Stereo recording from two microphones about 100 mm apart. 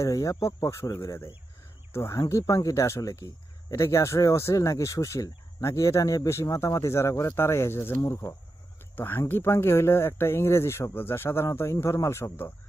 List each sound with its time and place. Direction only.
0.0 s speech: 35° left (ahead or behind)